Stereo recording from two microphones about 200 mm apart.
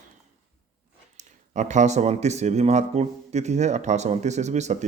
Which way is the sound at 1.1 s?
35° right (ahead or behind).